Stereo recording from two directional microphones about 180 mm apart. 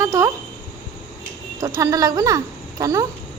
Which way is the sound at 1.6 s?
15° right (ahead or behind).